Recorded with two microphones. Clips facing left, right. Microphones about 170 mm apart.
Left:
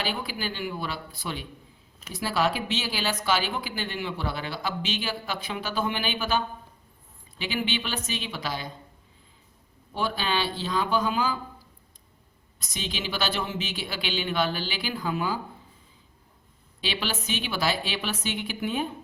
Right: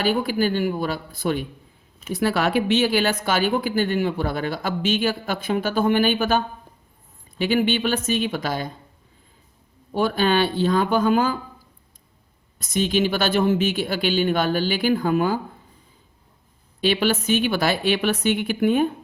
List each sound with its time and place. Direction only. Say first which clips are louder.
0.0 s speech: right 10 dB; 50° right (ahead or behind)
9.9 s speech: right 8 dB; 50° right (ahead or behind)
12.5 s speech: right 14 dB; 50° right (ahead or behind)
16.8 s a woman's voice: right 11 dB; 55° right (ahead or behind)